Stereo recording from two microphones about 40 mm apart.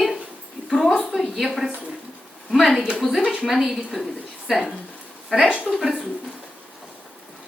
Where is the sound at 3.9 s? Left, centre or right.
Centre.